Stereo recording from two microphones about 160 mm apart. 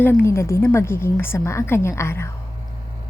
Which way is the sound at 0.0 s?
15° left (ahead or behind).